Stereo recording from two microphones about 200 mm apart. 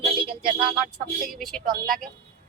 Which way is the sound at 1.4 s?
Centre (ahead or behind).